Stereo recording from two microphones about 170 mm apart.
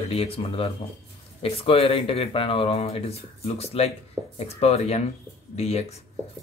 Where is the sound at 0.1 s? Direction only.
35° left (ahead or behind).